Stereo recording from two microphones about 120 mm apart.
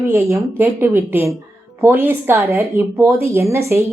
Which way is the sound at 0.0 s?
20° right (ahead or behind).